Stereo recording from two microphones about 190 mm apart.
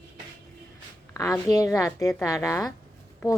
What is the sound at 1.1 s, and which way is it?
A woman's voice, 15° left (ahead or behind).